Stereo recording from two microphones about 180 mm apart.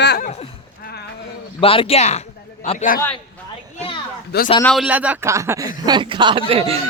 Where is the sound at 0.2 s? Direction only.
40° left (ahead or behind).